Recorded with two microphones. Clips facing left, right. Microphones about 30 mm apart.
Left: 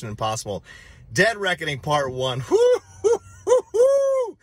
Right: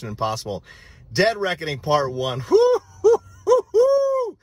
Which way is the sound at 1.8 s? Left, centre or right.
Right.